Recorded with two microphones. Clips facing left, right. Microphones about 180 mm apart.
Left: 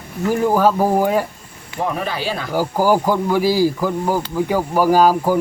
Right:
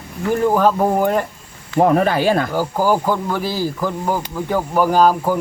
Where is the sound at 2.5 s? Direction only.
10° left (ahead or behind).